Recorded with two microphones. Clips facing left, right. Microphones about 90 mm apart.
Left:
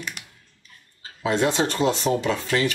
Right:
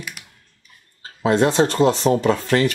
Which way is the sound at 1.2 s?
40° right (ahead or behind).